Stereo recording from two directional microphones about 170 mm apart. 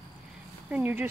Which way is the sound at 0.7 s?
10° right (ahead or behind).